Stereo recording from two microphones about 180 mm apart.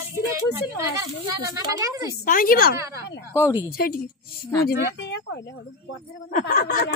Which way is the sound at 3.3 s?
15° left (ahead or behind).